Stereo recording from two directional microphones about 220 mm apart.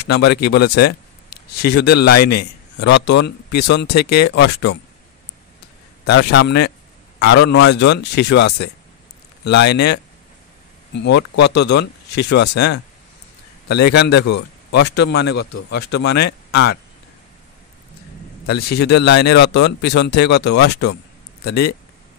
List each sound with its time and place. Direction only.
0.1 s speech: 50° left (ahead or behind)
6.0 s a man's voice: 50° left (ahead or behind)
11.5 s speech: 50° left (ahead or behind)
18.5 s speech: 45° left (ahead or behind)